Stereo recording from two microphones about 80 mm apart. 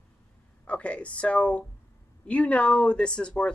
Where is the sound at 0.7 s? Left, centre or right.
Centre.